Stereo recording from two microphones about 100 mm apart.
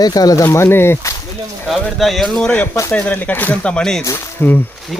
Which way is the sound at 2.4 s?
15° left (ahead or behind).